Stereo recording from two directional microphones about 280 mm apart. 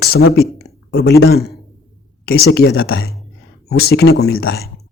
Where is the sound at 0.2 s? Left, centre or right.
Left.